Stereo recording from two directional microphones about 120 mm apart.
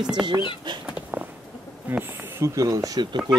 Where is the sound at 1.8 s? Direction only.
20° right (ahead or behind); by 3.3 s 35° right (ahead or behind).